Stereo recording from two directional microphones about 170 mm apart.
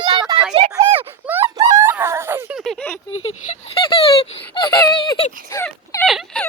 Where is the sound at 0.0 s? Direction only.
30° right (ahead or behind).